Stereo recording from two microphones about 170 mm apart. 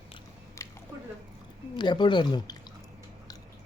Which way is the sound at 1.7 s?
25° left (ahead or behind).